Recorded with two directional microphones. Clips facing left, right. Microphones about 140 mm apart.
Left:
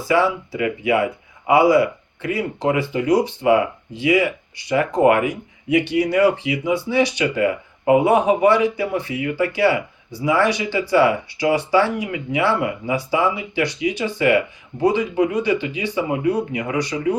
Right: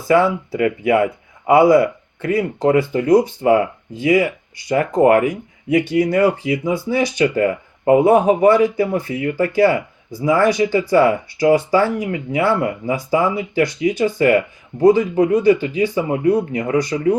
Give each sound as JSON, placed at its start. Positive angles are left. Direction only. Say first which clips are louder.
{"t": 0.1, "sound": "speech", "louder": "right 4 dB", "side_deg": -50}